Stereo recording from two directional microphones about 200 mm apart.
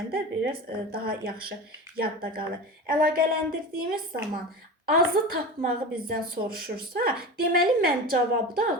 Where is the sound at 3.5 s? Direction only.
45° right (ahead or behind).